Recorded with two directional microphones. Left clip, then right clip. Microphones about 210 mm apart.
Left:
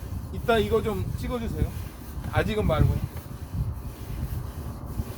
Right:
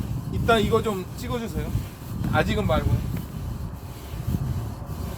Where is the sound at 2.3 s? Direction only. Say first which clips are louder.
Right 2 dB; 5° right (ahead or behind).